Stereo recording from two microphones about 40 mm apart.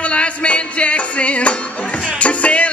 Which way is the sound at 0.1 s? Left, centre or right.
Left.